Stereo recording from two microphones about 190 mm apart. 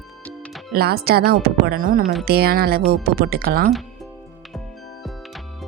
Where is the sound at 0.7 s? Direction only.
55° right (ahead or behind).